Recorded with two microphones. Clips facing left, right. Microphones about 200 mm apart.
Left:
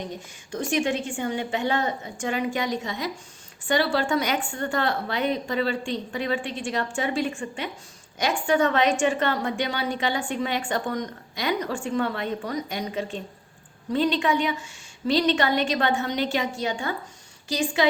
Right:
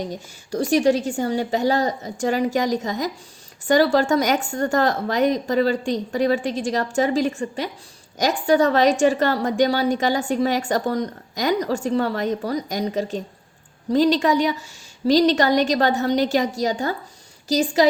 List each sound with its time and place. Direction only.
0.5 s a woman's voice: 40° right (ahead or behind)